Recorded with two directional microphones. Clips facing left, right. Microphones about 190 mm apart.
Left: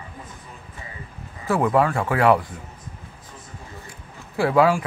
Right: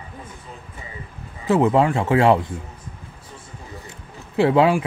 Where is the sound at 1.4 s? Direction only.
25° right (ahead or behind).